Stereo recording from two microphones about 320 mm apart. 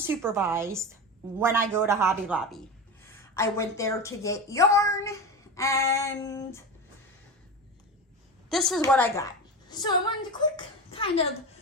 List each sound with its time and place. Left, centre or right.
0.0 s a woman's voice: centre
3.0 s a woman's voice: centre
5.5 s child singing: centre
8.4 s a woman's voice: centre